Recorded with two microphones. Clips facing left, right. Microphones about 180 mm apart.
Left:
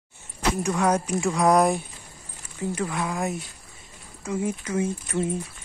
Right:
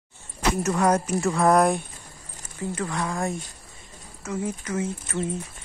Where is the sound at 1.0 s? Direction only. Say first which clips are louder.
Even; centre (ahead or behind).